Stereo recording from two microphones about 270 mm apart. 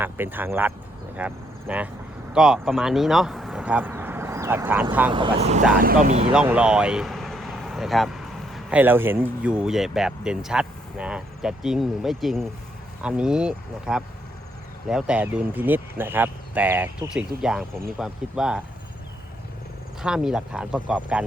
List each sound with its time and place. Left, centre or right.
0.0 s speech: centre
5.1 s speech: right
6.3 s speech: centre
20.0 s speech: centre